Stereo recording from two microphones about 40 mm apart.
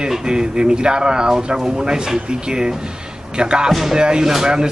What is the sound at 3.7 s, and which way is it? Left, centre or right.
Music, centre.